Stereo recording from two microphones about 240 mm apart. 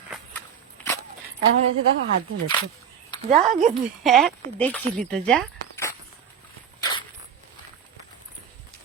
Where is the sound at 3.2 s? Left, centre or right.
Right.